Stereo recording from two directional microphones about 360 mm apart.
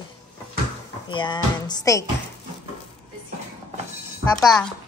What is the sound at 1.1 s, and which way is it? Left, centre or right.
Speech, centre.